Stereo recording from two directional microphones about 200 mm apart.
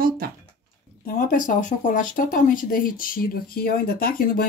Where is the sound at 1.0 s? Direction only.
40° left (ahead or behind).